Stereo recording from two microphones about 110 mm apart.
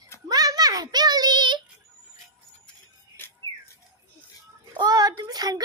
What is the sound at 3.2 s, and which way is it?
Squawk, 20° left (ahead or behind).